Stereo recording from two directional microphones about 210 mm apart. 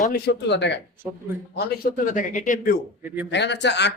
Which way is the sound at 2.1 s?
35° left (ahead or behind).